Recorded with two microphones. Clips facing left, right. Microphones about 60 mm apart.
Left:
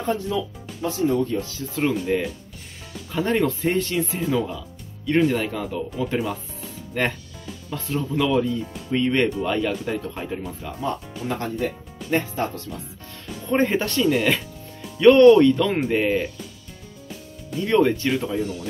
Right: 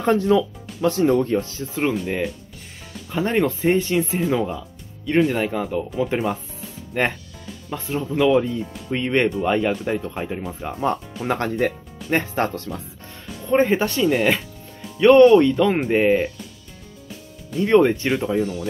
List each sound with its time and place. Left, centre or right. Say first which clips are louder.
0.0 s speech: right 7 dB; right
1.4 s speech: right 1 dB; right
1.8 s speech: even; centre
4.3 s speech: right 2 dB; right
5.0 s speech: right 1 dB; centre
10.6 s speech: right 7 dB; right
13.5 s speech: right 3 dB; centre
17.6 s speech: right 3 dB; right